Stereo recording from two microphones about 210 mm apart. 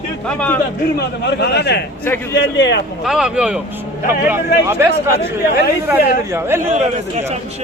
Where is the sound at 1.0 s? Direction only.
50° left (ahead or behind).